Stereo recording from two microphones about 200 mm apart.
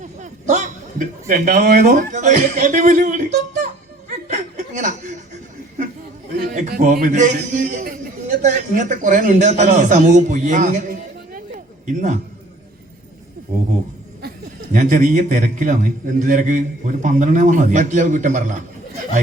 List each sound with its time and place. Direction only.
0.0 s a man's voice: 35° right (ahead or behind)
4.3 s chuckle: 40° right (ahead or behind)
6.5 s a man's voice: 40° right (ahead or behind)
11.3 s a sound: 40° right (ahead or behind)
14.7 s a man's voice: 40° right (ahead or behind)